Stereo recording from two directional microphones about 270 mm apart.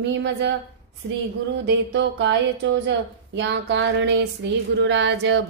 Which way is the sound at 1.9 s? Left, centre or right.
Right.